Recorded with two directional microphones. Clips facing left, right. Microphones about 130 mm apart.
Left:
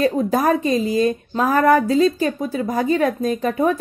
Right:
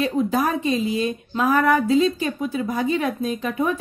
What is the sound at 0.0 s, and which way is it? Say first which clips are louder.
Speech: left 3 dB; 40° left (ahead or behind).